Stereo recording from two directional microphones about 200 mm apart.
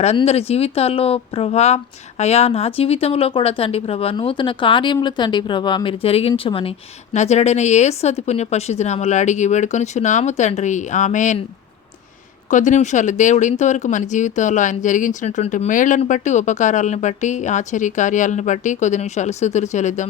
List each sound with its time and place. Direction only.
0.0 s speech: 30° left (ahead or behind)
12.5 s speech: 40° left (ahead or behind)